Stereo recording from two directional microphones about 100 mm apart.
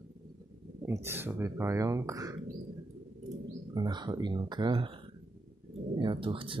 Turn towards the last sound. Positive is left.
turn(degrees=-60)  # may be behind; listen again after turning